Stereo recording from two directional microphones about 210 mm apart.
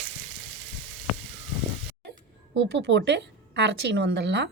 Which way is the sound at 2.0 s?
50° right (ahead or behind).